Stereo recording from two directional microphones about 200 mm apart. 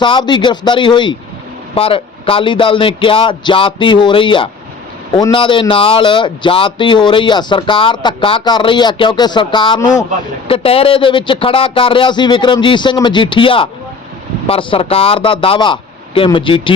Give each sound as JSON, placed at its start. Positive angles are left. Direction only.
{"t": 0.0, "sound": "speech", "side_deg": 25}